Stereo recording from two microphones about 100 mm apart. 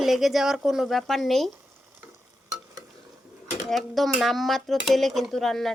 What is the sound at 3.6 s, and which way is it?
Speech, centre (ahead or behind).